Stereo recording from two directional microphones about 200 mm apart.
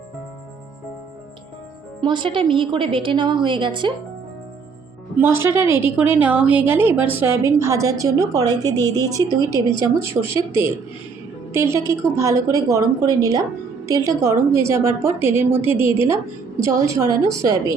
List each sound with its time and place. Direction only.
2.0 s a woman's voice: 25° right (ahead or behind)
5.1 s a woman's voice: 10° right (ahead or behind)
8.6 s a woman's voice: 15° left (ahead or behind)
9.0 s a woman's voice: 15° right (ahead or behind)